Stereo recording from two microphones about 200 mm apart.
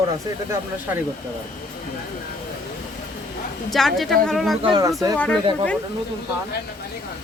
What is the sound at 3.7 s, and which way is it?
Speech, centre (ahead or behind).